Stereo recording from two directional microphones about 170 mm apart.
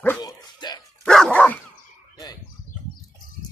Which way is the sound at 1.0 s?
5° left (ahead or behind).